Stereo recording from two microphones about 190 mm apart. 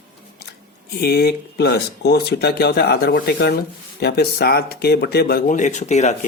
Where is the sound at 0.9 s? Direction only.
55° left (ahead or behind); by 6.2 s 35° left (ahead or behind).